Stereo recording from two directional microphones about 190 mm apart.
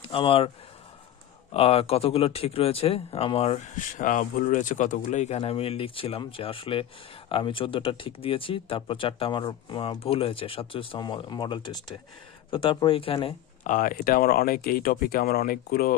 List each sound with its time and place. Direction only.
0.0 s speech: 30° left (ahead or behind)
1.5 s speech: 30° left (ahead or behind)
13.7 s speech: 45° left (ahead or behind)